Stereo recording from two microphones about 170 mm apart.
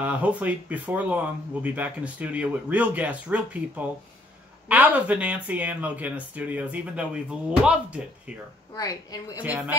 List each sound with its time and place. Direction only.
0.0 s speech: 10° right (ahead or behind)
8.7 s a woman's voice: 20° left (ahead or behind)
9.4 s speech: 10° right (ahead or behind)